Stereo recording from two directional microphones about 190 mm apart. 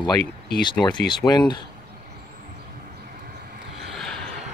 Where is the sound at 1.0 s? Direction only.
20° left (ahead or behind).